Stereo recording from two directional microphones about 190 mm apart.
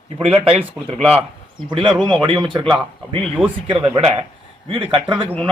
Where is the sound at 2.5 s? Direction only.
25° right (ahead or behind).